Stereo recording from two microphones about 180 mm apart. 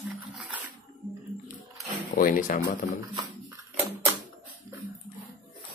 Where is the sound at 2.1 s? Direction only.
50° left (ahead or behind).